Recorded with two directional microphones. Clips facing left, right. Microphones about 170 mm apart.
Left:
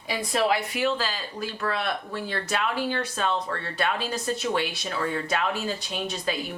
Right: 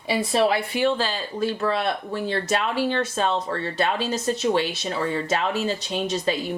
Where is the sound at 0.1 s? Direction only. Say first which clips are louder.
Right 4 dB; 30° right (ahead or behind).